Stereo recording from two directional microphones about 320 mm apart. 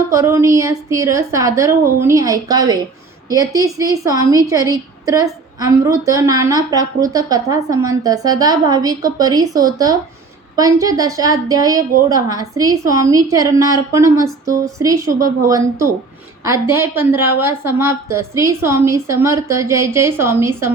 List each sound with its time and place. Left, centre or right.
0.1 s a woman's voice: centre